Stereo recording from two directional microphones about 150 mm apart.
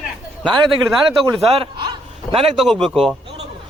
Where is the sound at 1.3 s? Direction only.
40° right (ahead or behind).